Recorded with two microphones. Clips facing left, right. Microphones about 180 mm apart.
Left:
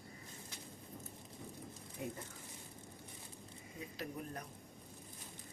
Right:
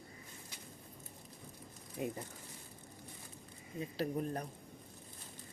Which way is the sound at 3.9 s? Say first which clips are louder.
Right 9 dB; 35° right (ahead or behind).